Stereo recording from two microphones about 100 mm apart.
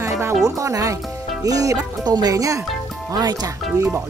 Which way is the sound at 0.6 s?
35° right (ahead or behind).